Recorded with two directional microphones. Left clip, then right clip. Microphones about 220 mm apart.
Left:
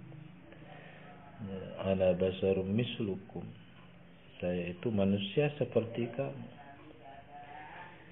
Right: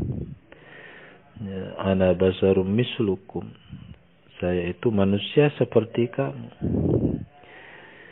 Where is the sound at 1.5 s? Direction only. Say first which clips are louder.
Right 8 dB; 45° right (ahead or behind).